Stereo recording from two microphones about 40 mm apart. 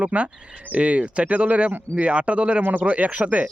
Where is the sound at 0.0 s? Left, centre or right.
Right.